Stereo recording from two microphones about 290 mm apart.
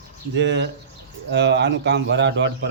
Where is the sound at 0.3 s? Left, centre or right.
Right.